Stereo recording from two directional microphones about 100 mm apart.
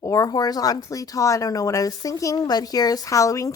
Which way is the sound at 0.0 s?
35° left (ahead or behind).